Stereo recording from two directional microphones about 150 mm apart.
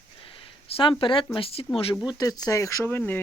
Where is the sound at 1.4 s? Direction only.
40° left (ahead or behind).